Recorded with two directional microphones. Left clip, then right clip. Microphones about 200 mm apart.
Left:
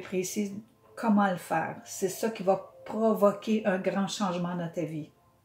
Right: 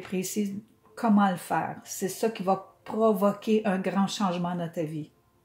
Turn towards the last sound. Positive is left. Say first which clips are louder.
# right 2 dB
turn(degrees=-40)  # may be behind; listen again after turning